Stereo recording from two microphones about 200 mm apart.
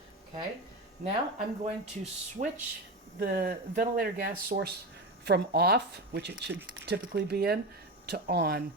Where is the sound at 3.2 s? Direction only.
50° right (ahead or behind).